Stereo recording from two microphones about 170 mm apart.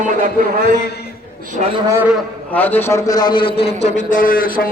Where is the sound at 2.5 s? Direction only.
10° left (ahead or behind); by 3.7 s 35° left (ahead or behind).